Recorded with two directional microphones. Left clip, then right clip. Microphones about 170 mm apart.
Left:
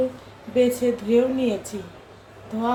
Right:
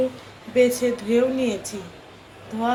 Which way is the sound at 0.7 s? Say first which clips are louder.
Left 1 dB; 10° left (ahead or behind).